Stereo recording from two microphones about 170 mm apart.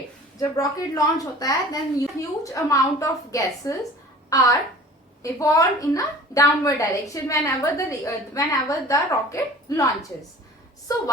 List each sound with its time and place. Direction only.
0.3 s a woman's voice: 20° left (ahead or behind)